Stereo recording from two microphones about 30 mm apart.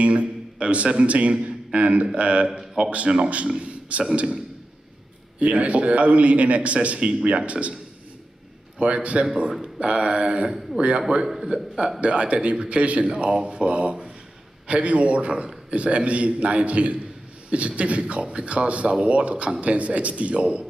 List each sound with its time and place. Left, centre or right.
0.0 s a sound: right
0.8 s a man's voice: right
5.4 s a man's voice: right
7.0 s speech: right
7.2 s a man's voice: right
8.7 s a man's voice: right
9.8 s speech: right
11.4 s a man's voice: right
12.0 s a man's voice: right